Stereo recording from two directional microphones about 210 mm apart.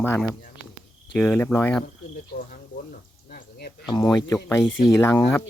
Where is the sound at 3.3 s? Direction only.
45° left (ahead or behind).